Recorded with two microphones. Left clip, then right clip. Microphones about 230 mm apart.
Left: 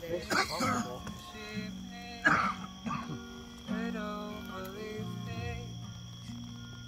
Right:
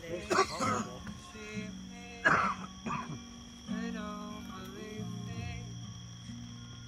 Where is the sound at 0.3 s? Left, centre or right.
Right.